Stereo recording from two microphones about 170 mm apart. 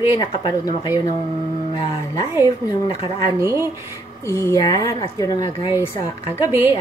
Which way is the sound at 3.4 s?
15° right (ahead or behind).